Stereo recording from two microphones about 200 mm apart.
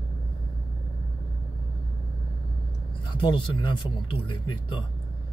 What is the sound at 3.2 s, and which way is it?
Speech, 25° left (ahead or behind).